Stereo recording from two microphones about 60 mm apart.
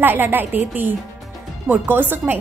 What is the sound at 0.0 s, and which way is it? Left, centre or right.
A woman's voice, right.